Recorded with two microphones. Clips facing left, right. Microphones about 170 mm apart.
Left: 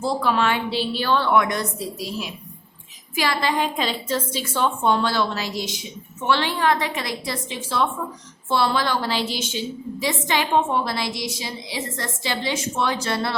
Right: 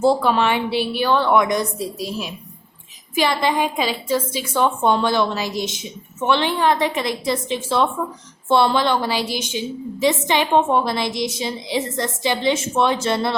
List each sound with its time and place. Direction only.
0.0 s a woman's voice: 25° right (ahead or behind)
3.2 s a woman's voice: 20° right (ahead or behind)